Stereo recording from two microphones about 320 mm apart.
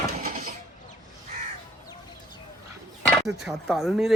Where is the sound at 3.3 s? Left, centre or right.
Centre.